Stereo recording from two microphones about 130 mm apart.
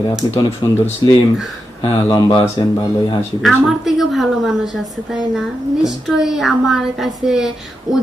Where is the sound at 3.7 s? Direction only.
Centre (ahead or behind).